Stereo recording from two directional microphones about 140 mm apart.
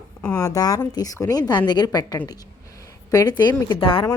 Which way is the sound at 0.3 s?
25° left (ahead or behind).